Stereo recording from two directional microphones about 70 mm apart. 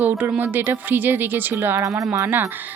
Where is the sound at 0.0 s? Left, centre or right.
Right.